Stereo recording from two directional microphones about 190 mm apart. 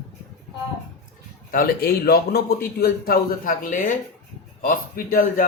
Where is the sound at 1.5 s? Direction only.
50° left (ahead or behind).